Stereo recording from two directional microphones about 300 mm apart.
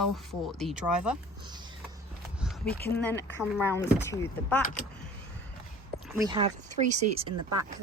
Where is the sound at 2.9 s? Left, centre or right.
Centre.